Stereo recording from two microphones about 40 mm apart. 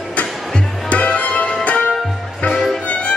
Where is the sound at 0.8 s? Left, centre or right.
Left.